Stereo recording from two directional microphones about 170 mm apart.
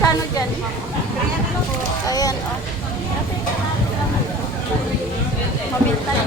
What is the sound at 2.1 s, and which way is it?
Speech, 20° left (ahead or behind).